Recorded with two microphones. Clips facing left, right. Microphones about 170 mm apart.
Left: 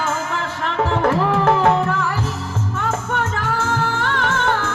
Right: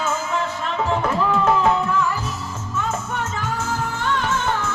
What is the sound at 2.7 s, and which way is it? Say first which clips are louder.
Music: left 2 dB; 60° left (ahead or behind).